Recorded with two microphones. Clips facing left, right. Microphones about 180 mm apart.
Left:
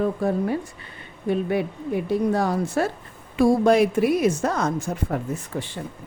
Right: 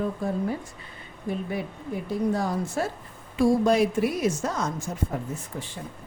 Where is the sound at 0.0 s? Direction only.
70° left (ahead or behind).